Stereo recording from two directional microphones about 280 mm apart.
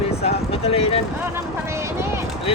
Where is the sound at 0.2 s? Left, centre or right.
Left.